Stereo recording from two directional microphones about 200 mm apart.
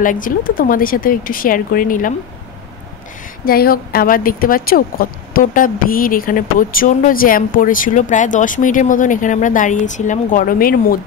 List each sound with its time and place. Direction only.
0.0 s a woman's voice: 40° left (ahead or behind)
3.4 s a woman's voice: 50° left (ahead or behind)